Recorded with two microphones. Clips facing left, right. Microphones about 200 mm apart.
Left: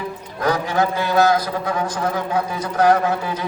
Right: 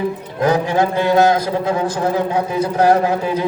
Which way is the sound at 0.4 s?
25° right (ahead or behind).